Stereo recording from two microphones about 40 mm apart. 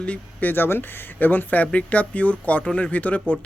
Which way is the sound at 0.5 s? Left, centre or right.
Left.